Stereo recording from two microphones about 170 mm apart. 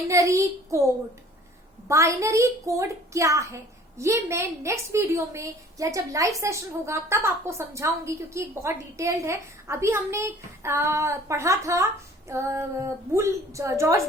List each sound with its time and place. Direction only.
0.1 s a child's voice: 20° right (ahead or behind)
1.9 s a woman's voice: 15° right (ahead or behind)